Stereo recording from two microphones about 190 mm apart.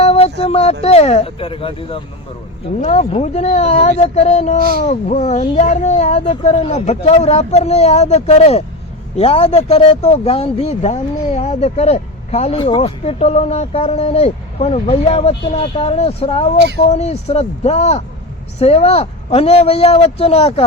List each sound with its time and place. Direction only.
0.0 s speech: 30° left (ahead or behind)